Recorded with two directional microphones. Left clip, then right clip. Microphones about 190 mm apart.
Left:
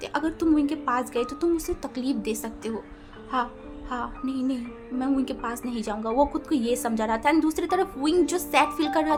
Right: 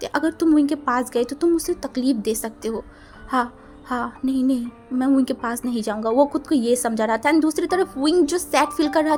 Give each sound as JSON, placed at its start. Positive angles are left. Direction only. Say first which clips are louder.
{"t": 0.0, "sound": "music", "louder": "right 5 dB", "side_deg": -25}